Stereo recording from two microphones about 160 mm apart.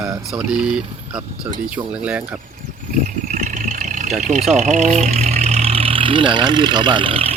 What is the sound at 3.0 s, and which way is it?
Speech, 55° right (ahead or behind).